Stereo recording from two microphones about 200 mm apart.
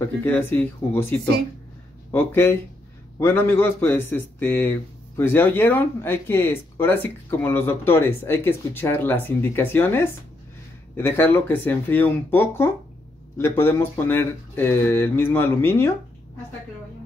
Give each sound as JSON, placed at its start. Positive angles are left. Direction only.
{"t": 0.0, "sound": "speech", "side_deg": 10}